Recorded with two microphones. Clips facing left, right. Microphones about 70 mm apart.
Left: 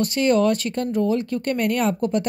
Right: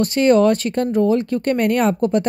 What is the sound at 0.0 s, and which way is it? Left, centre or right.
Speech, right.